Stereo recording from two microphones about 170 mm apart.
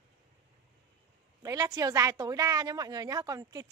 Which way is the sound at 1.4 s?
20° right (ahead or behind).